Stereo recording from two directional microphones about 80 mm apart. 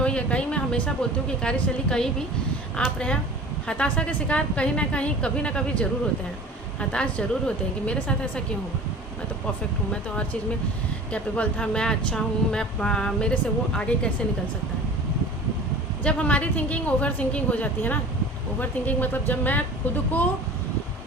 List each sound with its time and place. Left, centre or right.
0.0 s a sound: centre
1.4 s speech: centre
11.1 s speech: centre
16.0 s speech: centre